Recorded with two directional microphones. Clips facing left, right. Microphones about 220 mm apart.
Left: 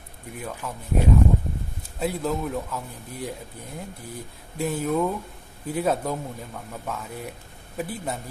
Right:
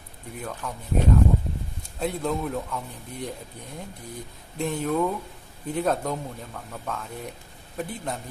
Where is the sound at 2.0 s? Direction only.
5° left (ahead or behind).